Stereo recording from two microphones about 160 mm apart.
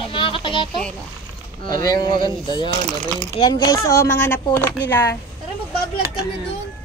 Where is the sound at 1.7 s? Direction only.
25° left (ahead or behind).